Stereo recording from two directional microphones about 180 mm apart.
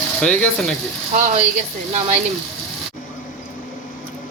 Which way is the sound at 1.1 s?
40° right (ahead or behind).